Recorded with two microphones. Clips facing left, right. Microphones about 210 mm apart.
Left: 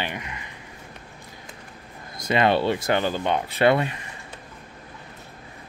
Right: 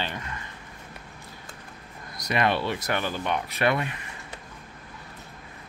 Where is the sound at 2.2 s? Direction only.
25° left (ahead or behind).